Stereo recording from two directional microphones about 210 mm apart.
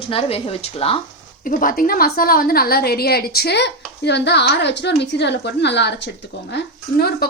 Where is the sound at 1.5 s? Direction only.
40° left (ahead or behind).